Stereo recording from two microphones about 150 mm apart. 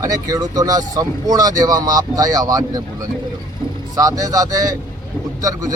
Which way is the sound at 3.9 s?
25° right (ahead or behind).